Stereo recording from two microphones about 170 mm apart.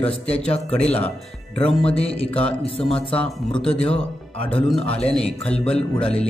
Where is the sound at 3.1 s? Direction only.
Centre (ahead or behind).